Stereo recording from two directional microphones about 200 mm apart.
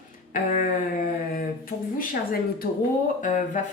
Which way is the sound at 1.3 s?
45° left (ahead or behind).